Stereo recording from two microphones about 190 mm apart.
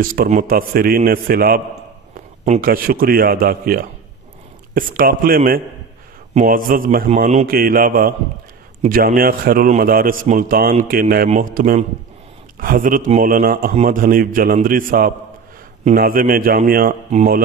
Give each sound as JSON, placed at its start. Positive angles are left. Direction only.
{"t": 0.0, "sound": "a man's voice", "side_deg": -50}
{"t": 2.6, "sound": "a man's voice", "side_deg": -50}